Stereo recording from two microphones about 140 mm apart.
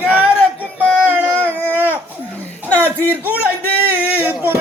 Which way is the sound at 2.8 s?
15° right (ahead or behind).